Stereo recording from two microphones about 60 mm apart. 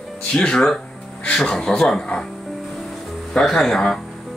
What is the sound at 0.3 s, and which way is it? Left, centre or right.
Speech, centre.